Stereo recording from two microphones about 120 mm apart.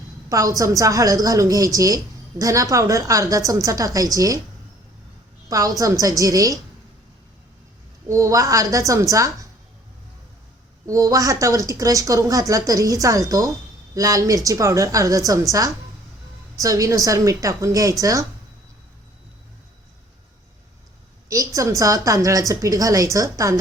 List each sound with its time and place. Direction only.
0.3 s speech: 30° right (ahead or behind)
5.5 s speech: 30° right (ahead or behind)
8.0 s speech: 25° right (ahead or behind)
10.8 s speech: 30° right (ahead or behind)
16.6 s speech: 30° right (ahead or behind)
21.2 s speech: 25° right (ahead or behind)